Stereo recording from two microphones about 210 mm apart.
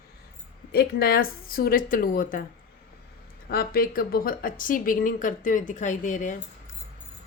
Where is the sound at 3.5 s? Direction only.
45° left (ahead or behind).